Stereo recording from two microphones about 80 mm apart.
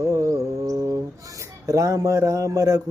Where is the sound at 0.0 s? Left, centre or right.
Right.